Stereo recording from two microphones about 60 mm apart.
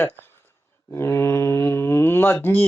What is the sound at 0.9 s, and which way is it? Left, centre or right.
Speech, left.